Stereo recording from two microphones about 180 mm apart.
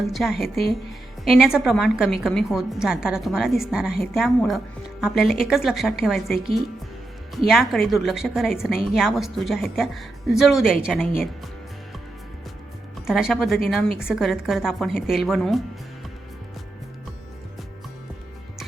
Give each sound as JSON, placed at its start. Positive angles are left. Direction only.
{"t": 0.1, "sound": "a woman's voice", "side_deg": 0}
{"t": 13.1, "sound": "a woman's voice", "side_deg": 0}